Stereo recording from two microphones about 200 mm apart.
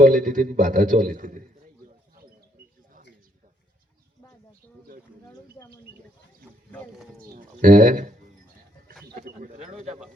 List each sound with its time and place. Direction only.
0.0 s a man's voice: 40° right (ahead or behind)
7.3 s bird: 40° right (ahead or behind)
9.6 s bird: 35° right (ahead or behind)